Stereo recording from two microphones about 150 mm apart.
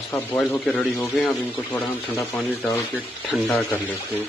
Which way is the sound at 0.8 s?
20° left (ahead or behind).